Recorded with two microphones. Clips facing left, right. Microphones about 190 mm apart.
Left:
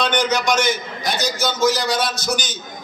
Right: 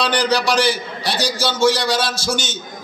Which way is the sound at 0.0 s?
35° right (ahead or behind).